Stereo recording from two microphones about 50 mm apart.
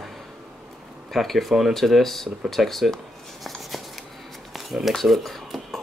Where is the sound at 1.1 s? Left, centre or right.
Centre.